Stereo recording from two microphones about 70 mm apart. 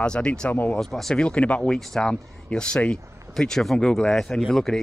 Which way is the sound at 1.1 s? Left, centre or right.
Centre.